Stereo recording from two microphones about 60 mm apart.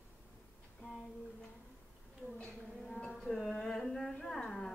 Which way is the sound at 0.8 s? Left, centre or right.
Centre.